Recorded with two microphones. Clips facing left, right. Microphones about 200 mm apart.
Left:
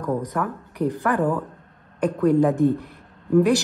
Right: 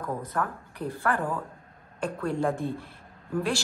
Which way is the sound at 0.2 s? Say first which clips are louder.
Left 5 dB; 15° left (ahead or behind).